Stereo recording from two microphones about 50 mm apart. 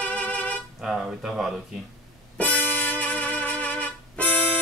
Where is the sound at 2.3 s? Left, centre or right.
Left.